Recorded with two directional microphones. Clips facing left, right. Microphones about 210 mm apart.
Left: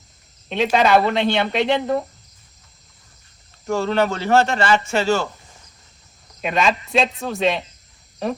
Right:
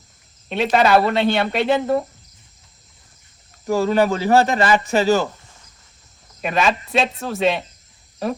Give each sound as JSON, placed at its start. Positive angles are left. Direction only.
{"t": 0.4, "sound": "speech", "side_deg": -5}
{"t": 3.7, "sound": "a man's voice", "side_deg": -15}
{"t": 6.4, "sound": "speech", "side_deg": 0}